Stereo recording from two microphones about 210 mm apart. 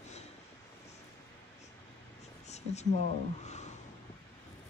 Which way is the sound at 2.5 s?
30° left (ahead or behind).